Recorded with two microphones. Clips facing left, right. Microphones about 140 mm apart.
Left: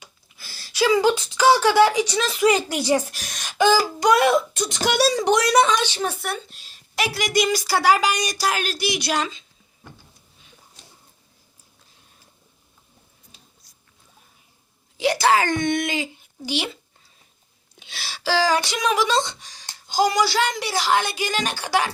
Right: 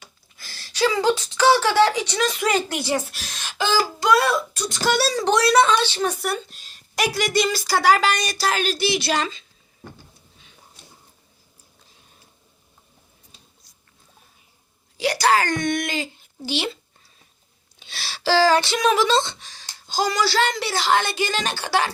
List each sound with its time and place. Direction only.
0.0 s a woman's voice: 10° left (ahead or behind)
14.9 s speech: 20° left (ahead or behind)
17.7 s a woman's voice: 15° left (ahead or behind)